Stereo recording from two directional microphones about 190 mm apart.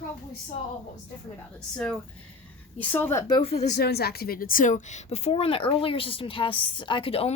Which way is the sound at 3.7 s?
55° left (ahead or behind).